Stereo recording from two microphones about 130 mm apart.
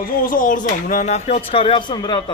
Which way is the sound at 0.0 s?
90° left.